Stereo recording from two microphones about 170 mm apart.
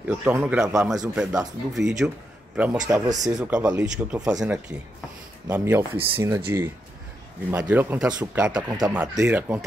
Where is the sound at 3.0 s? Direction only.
20° right (ahead or behind).